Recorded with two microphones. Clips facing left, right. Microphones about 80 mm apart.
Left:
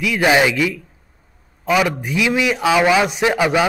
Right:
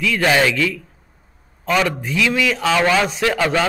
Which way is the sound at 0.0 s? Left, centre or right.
Centre.